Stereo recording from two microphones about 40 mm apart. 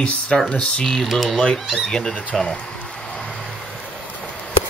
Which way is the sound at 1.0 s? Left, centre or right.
Centre.